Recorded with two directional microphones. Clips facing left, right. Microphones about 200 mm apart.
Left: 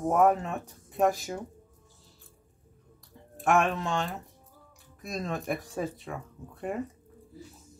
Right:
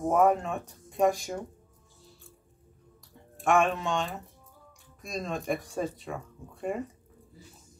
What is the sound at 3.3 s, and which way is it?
Speech, centre (ahead or behind).